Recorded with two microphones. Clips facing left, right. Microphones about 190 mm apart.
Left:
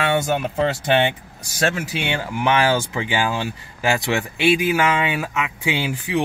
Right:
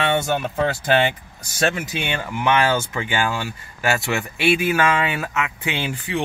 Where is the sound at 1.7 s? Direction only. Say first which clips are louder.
Left 1 dB; 10° left (ahead or behind).